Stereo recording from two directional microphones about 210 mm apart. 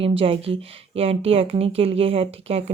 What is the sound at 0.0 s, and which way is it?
Speech, 25° right (ahead or behind).